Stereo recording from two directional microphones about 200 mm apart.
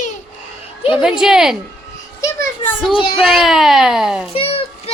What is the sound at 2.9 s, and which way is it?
Speech, 25° left (ahead or behind).